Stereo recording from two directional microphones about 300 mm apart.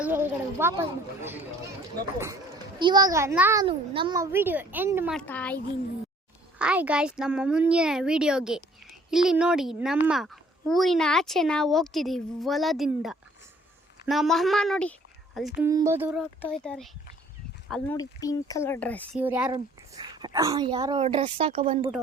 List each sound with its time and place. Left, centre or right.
0.0 s a child's voice: centre
6.6 s a child's voice: centre
19.2 s a child's voice: centre